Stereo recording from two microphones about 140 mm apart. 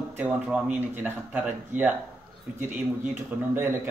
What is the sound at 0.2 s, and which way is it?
Speech, 10° right (ahead or behind).